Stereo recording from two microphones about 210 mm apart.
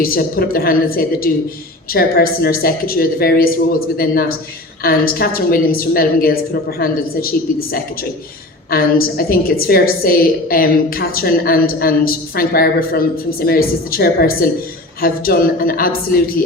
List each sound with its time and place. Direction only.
0.0 s a woman's voice: 45° left (ahead or behind)